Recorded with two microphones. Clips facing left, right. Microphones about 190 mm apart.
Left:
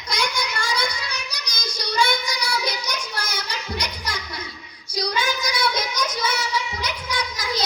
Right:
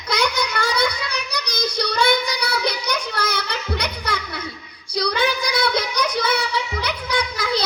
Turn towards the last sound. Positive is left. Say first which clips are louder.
# right 4 dB
turn(degrees=-60)  # may be behind; listen again after turning